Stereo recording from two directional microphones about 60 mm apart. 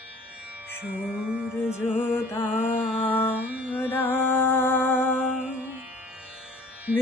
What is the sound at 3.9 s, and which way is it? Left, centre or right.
Music, left.